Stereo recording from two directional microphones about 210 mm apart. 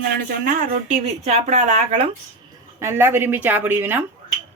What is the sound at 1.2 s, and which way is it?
Speech, 35° right (ahead or behind).